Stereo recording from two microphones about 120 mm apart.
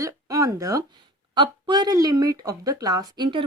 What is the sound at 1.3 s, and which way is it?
Speech, 40° right (ahead or behind).